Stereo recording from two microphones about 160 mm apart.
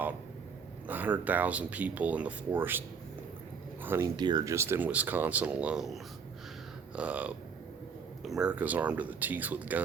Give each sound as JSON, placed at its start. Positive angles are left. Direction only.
{"t": 0.9, "sound": "speech", "side_deg": -10}
{"t": 3.8, "sound": "speech", "side_deg": -15}
{"t": 4.2, "sound": "speech", "side_deg": -25}